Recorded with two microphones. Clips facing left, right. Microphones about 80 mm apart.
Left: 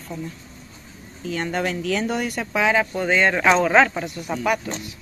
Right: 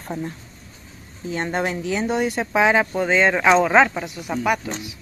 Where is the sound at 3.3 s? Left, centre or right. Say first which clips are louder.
Right 1 dB; centre.